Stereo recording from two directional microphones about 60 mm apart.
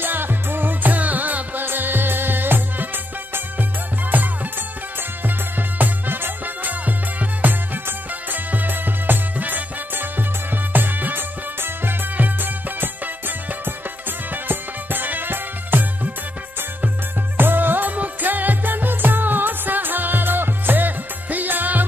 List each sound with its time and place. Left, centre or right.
0.0 s music: right
4.1 s music: right
17.4 s music: right